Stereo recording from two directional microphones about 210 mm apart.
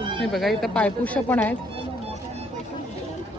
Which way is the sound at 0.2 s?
Centre (ahead or behind).